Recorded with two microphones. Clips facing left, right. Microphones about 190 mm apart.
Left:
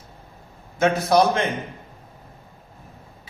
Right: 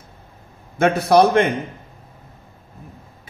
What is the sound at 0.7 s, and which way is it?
Speech, 60° right (ahead or behind).